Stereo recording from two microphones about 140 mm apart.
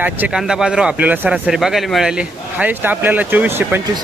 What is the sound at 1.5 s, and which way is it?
A man's voice, centre (ahead or behind).